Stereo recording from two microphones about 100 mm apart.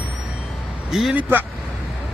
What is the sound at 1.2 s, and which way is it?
Speech, 20° right (ahead or behind).